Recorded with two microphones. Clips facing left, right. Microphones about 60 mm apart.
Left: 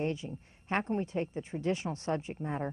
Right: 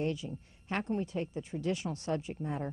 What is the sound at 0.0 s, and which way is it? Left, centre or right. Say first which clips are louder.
A woman's voice: even; left.